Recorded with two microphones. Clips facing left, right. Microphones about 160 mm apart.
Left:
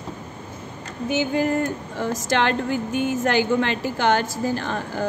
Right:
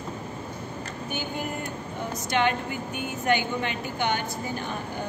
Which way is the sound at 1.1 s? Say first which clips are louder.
Left 12 dB; 90° left.